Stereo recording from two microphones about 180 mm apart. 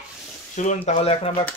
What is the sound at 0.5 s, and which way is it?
Speech, 40° left (ahead or behind).